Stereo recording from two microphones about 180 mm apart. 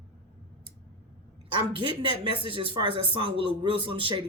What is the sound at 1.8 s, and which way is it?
Speech, 30° right (ahead or behind).